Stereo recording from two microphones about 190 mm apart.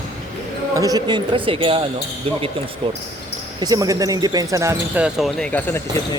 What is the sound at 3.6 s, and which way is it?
Speech, 20° right (ahead or behind).